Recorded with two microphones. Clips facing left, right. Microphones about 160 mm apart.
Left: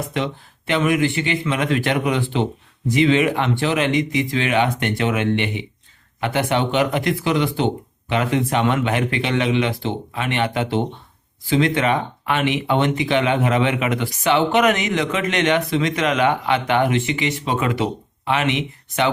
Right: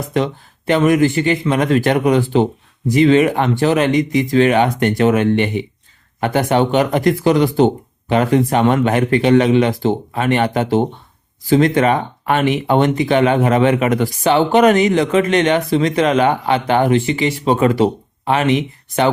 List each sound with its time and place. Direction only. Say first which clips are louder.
0.1 s speech: right 6 dB; 40° right (ahead or behind)